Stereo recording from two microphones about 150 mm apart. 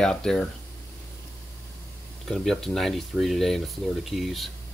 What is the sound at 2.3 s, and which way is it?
Speech, centre (ahead or behind).